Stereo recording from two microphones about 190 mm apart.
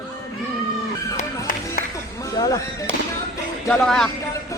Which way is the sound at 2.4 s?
15° left (ahead or behind).